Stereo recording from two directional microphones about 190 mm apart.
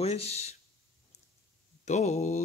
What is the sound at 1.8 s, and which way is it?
Speech, 35° left (ahead or behind).